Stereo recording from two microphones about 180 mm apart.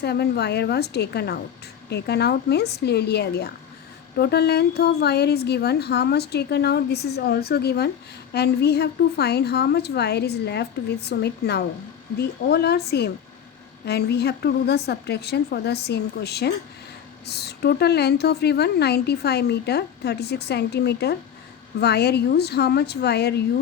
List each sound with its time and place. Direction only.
0.0 s a woman's voice: 65° left (ahead or behind)